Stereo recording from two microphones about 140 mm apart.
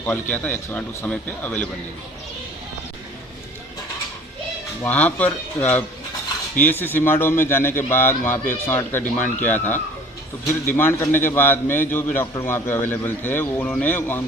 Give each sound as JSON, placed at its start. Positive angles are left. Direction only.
{"t": 0.0, "sound": "a man's voice", "side_deg": 15}
{"t": 4.8, "sound": "a man's voice", "side_deg": 10}